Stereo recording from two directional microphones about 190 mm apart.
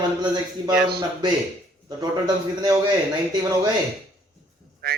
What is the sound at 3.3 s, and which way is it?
Speech, 20° right (ahead or behind).